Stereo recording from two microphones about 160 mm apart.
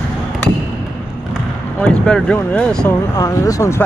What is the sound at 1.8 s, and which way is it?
Speech, 5° left (ahead or behind).